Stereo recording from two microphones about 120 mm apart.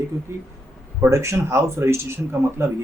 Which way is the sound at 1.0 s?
25° right (ahead or behind).